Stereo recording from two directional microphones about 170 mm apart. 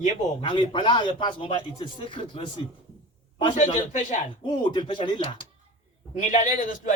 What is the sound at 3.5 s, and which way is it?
Speech, 45° left (ahead or behind).